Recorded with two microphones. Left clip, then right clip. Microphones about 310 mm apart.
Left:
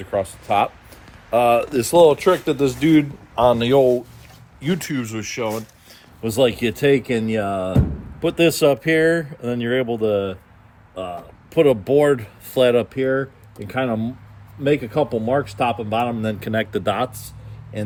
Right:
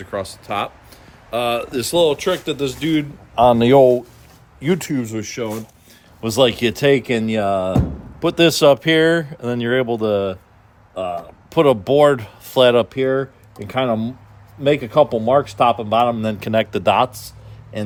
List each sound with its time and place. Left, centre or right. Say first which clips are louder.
0.0 s speech: left 3 dB; centre
3.3 s speech: right 3 dB; centre
3.6 s speech: right 5 dB; right
4.6 s speech: right 5 dB; centre
5.4 s speech: left 2 dB; centre
6.2 s speech: right 2 dB; right
11.5 s speech: right 2 dB; right